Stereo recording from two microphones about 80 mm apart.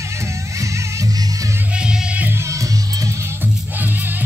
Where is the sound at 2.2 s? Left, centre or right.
Right.